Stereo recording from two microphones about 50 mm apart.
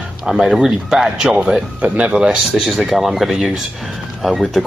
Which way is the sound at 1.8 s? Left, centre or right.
Right.